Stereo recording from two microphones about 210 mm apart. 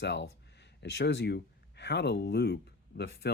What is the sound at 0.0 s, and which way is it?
Speech, 55° left (ahead or behind).